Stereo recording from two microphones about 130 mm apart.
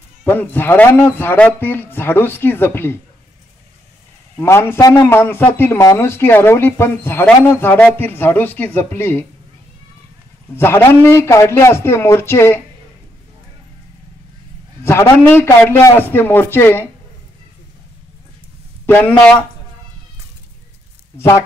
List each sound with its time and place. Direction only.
0.2 s a man's voice: 15° left (ahead or behind)
4.4 s a man's voice: 15° left (ahead or behind)
10.5 s a man's voice: 20° left (ahead or behind)
14.8 s a man's voice: 20° left (ahead or behind)
18.9 s a man's voice: 10° left (ahead or behind)
21.2 s a man's voice: 25° left (ahead or behind)